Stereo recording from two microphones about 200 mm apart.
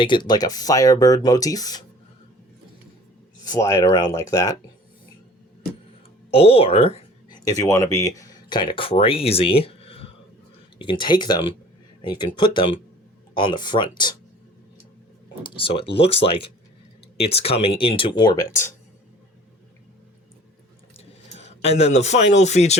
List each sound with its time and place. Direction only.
0.0 s speech: 25° left (ahead or behind)
3.5 s speech: 15° left (ahead or behind)
6.3 s speech: 30° left (ahead or behind)
7.6 s speech: 15° left (ahead or behind)
15.4 s speech: 25° left (ahead or behind)
21.0 s speech: 30° left (ahead or behind)